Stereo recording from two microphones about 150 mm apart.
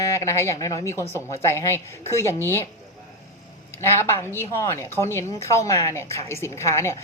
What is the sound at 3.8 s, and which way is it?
A woman's voice, 15° left (ahead or behind).